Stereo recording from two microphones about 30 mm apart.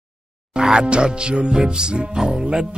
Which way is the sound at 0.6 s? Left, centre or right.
Right.